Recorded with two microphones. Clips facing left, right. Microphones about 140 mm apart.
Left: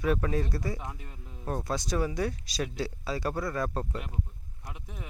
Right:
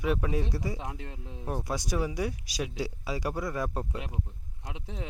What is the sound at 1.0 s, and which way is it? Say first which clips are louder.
Speech: right 5 dB; 85° right.